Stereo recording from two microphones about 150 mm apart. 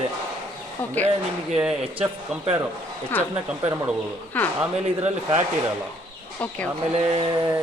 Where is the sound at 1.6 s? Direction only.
5° right (ahead or behind).